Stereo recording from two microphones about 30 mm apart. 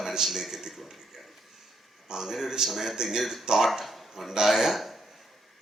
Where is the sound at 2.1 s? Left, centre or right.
Centre.